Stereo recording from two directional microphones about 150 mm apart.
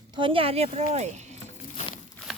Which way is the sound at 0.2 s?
35° right (ahead or behind).